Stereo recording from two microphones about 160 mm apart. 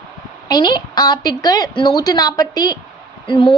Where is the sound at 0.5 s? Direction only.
25° left (ahead or behind).